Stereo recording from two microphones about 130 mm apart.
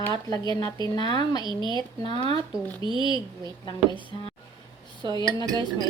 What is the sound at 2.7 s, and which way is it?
Speech, 40° right (ahead or behind).